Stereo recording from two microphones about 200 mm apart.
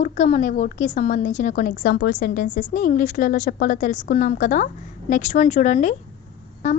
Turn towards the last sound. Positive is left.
turn(degrees=35)  # may be behind; listen again after turning